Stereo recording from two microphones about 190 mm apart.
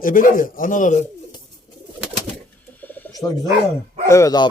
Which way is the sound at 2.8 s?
20° left (ahead or behind).